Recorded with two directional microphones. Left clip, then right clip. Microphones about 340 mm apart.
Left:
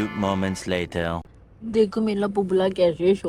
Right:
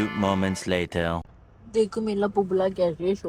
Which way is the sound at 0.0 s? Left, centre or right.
Centre.